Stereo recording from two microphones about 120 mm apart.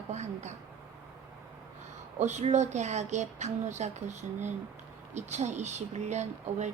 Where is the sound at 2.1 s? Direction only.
75° right (ahead or behind).